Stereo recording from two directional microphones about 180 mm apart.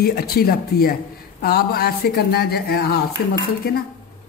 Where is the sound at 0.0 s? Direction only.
60° left (ahead or behind).